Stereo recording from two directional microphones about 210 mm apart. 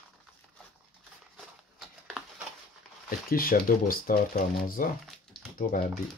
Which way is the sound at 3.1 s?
45° left (ahead or behind).